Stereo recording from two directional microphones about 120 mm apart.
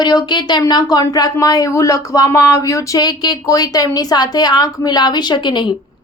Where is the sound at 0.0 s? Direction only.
35° left (ahead or behind).